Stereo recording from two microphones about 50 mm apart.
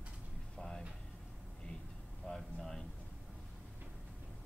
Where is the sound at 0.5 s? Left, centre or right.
Centre.